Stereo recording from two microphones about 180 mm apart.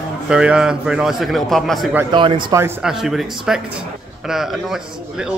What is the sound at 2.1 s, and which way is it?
Speech, 25° right (ahead or behind).